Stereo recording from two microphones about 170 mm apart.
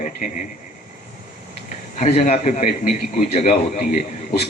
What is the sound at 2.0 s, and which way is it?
A man's voice, 40° left (ahead or behind).